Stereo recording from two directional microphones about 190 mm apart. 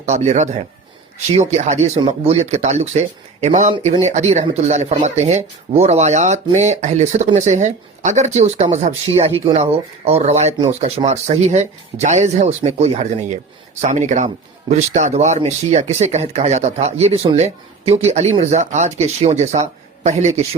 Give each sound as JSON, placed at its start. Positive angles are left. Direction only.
{"t": 0.0, "sound": "speech", "side_deg": -35}
{"t": 3.7, "sound": "speech", "side_deg": -25}
{"t": 4.0, "sound": "speech", "side_deg": -40}